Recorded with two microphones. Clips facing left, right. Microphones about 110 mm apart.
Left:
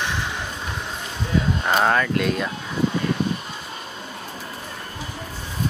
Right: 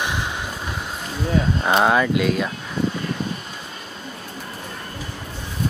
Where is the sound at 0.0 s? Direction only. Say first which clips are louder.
Right 1 dB; 15° right (ahead or behind).